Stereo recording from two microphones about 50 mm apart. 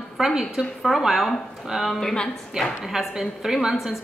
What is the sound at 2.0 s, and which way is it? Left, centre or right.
Speech, centre.